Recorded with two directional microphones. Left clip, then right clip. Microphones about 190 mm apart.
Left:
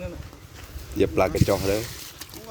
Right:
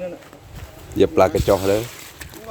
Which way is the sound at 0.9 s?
25° right (ahead or behind).